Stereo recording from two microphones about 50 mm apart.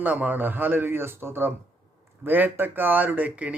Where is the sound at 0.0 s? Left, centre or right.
Right.